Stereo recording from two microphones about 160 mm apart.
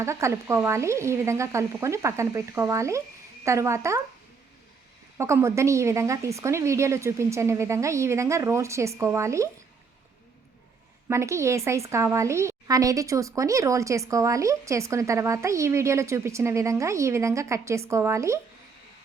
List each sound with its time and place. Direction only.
0.0 s a woman's voice: 20° right (ahead or behind)
5.1 s speech: 15° right (ahead or behind)
11.1 s a woman's voice: 15° right (ahead or behind)